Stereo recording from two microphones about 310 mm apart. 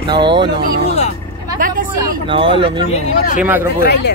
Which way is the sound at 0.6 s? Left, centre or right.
Right.